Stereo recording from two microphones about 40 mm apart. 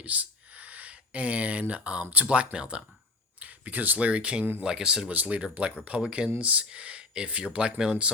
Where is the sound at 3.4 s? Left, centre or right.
Right.